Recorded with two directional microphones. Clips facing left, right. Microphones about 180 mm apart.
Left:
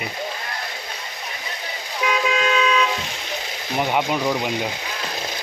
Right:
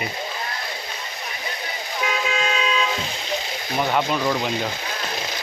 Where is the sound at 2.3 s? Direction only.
35° right (ahead or behind).